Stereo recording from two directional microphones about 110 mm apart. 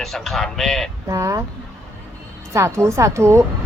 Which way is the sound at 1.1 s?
30° right (ahead or behind).